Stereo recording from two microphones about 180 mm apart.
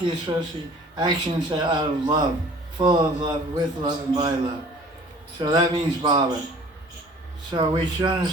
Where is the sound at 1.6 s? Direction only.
25° right (ahead or behind).